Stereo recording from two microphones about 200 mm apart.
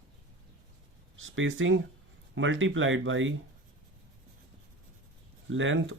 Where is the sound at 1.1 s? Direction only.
75° right (ahead or behind).